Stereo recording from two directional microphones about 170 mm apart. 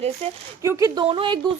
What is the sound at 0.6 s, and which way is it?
Speech, 20° right (ahead or behind).